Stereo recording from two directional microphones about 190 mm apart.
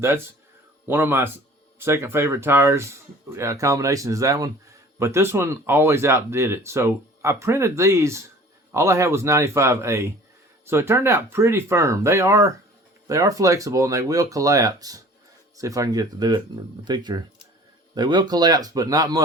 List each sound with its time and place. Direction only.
0.9 s speech: 10° right (ahead or behind)